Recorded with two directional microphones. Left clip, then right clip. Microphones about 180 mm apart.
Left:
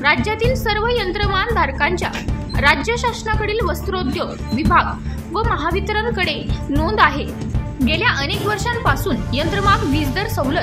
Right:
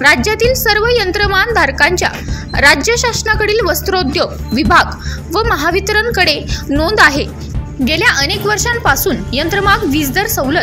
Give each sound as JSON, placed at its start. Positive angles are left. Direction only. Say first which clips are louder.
{"t": 0.0, "sound": "a woman's voice", "louder": "right 7 dB", "side_deg": -25}